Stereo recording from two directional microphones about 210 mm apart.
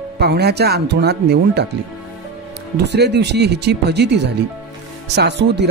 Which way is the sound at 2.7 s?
55° right (ahead or behind).